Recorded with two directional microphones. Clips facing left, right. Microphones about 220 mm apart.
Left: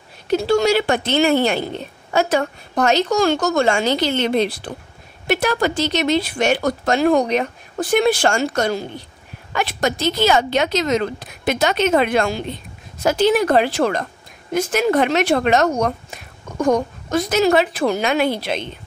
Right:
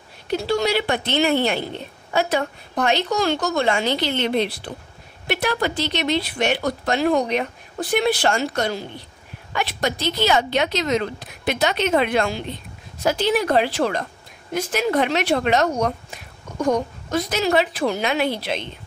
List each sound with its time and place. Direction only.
0.3 s speech: 45° left (ahead or behind)